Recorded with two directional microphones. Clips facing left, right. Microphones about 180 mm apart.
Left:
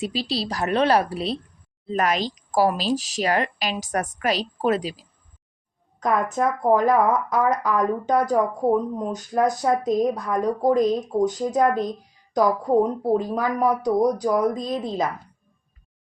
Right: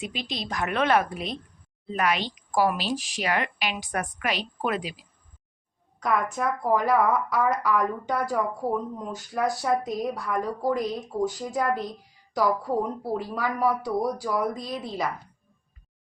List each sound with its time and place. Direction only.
0.0 s speech: 35° left (ahead or behind)
6.0 s speech: 20° left (ahead or behind)